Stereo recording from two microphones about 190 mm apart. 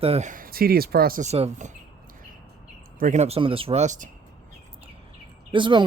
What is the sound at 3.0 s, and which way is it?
Speech, 40° right (ahead or behind).